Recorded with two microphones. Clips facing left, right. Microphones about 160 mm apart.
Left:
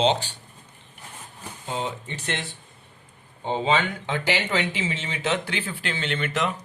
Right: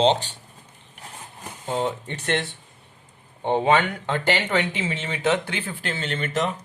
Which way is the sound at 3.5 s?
65° right (ahead or behind).